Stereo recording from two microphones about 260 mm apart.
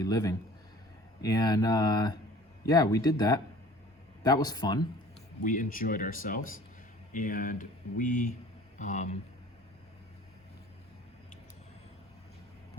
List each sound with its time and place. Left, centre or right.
0.0 s speech: centre
5.5 s speech: left